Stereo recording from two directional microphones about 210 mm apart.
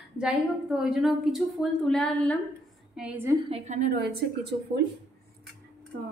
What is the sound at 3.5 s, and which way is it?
Speech, 40° right (ahead or behind).